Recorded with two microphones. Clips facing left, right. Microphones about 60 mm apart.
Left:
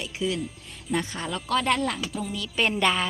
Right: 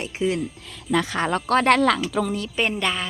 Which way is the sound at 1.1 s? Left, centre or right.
Right.